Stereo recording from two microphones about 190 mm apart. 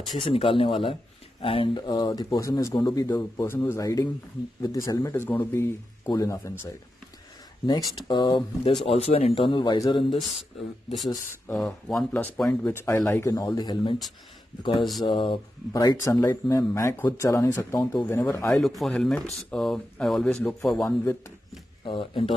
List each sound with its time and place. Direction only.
0.2 s speech: 30° left (ahead or behind)
11.1 s speech: 15° left (ahead or behind)
18.8 s speech: centre (ahead or behind)
21.8 s speech: 25° left (ahead or behind)